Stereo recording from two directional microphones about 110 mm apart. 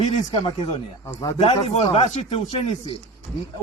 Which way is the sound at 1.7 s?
60° left (ahead or behind).